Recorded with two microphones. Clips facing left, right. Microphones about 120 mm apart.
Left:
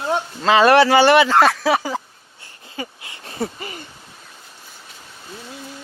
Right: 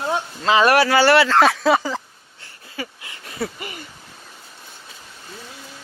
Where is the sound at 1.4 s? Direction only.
Centre (ahead or behind).